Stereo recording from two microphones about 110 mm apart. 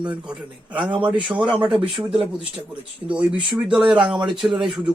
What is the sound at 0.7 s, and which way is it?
Speech, 45° right (ahead or behind).